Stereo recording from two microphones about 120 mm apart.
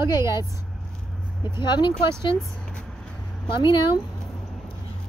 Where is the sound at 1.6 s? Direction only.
40° left (ahead or behind).